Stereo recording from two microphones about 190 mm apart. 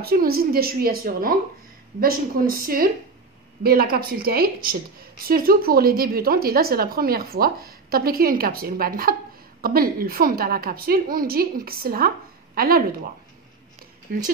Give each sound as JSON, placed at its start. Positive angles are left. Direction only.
{"t": 0.0, "sound": "a woman's voice", "side_deg": -50}